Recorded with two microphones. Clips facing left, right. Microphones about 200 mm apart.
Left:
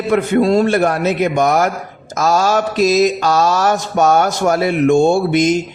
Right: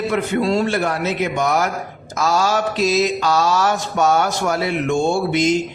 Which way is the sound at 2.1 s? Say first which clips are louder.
Left 4 dB; 45° left (ahead or behind).